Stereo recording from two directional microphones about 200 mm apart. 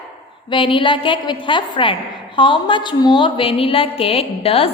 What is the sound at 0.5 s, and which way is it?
A woman's voice, 25° left (ahead or behind).